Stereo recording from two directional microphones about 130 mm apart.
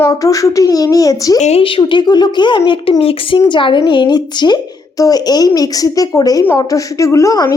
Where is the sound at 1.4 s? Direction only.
60° left (ahead or behind).